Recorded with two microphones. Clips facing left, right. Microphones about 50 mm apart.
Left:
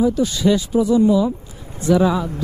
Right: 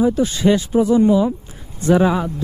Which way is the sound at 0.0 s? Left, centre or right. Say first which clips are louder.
Right 1 dB; right.